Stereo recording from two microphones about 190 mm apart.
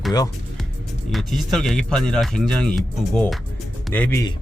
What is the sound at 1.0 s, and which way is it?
Speech, centre (ahead or behind).